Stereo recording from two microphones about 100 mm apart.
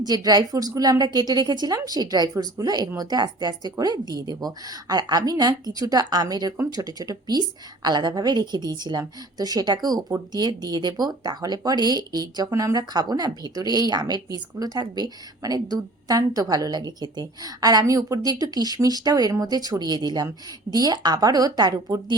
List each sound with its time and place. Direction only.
0.0 s a woman's voice: 40° right (ahead or behind)